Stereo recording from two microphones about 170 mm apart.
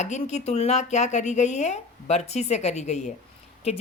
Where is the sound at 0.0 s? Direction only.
40° left (ahead or behind).